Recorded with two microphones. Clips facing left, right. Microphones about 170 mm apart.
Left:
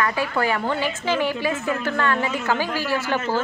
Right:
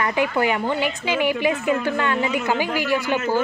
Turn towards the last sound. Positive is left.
turn(degrees=-15)  # may be behind; listen again after turning